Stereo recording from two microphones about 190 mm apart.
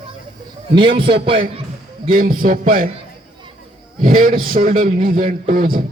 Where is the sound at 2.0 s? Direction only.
50° right (ahead or behind).